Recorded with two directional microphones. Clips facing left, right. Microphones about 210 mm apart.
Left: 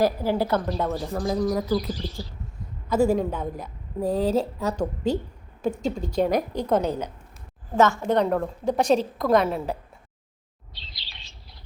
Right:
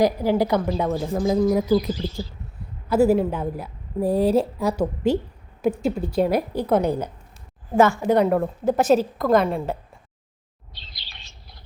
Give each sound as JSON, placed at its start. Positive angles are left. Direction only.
{"t": 0.0, "sound": "a woman's voice", "side_deg": -15}
{"t": 2.0, "sound": "speech", "side_deg": -25}
{"t": 2.9, "sound": "a woman's voice", "side_deg": -5}
{"t": 10.8, "sound": "chirp", "side_deg": -50}